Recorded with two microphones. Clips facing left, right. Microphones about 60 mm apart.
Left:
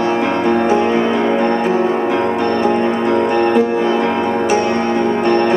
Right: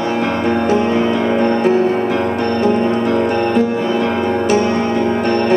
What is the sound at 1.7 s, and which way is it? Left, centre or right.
Music, left.